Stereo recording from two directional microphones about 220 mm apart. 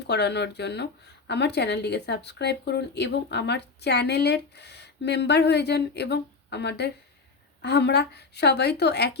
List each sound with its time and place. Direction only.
0.1 s speech: 50° left (ahead or behind)